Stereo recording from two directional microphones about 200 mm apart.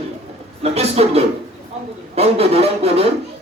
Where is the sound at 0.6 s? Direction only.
30° right (ahead or behind).